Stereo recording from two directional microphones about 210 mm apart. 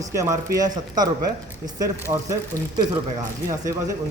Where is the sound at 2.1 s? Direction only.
20° right (ahead or behind).